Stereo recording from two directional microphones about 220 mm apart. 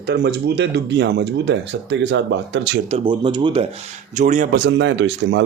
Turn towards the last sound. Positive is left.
turn(degrees=-55)  # may be behind; listen again after turning